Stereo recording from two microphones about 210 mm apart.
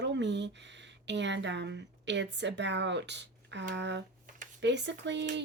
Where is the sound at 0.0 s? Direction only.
55° right (ahead or behind).